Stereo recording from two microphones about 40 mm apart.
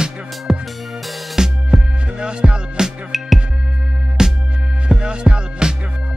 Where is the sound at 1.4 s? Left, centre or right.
Centre.